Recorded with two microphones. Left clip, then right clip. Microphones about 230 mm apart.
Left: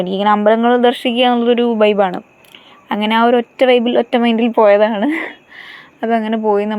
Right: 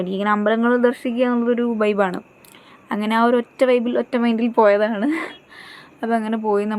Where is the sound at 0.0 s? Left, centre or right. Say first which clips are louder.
Left 7 dB; centre.